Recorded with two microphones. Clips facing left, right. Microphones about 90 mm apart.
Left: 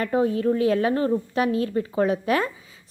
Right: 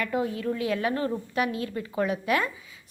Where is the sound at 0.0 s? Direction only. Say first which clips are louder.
Left 6 dB; 35° left (ahead or behind).